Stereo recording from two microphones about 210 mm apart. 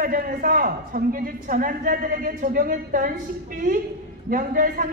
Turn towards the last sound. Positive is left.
turn(degrees=-40)  # may be behind; listen again after turning